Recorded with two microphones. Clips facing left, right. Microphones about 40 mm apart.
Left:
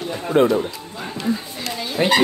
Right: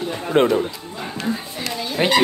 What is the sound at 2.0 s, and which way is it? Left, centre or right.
Speech, right.